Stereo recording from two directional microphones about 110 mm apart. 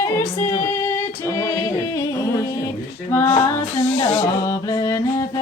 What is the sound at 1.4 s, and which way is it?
Music, 25° left (ahead or behind).